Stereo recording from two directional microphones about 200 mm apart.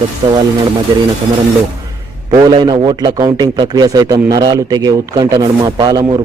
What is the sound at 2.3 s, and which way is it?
A man's voice, 25° right (ahead or behind).